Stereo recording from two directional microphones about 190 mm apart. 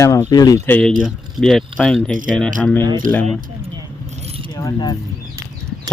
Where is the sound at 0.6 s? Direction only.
10° left (ahead or behind).